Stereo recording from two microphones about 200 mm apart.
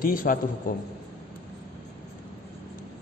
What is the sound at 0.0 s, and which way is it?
Speech, 45° left (ahead or behind).